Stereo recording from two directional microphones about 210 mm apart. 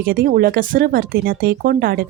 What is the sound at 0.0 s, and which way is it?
Speech, 45° right (ahead or behind).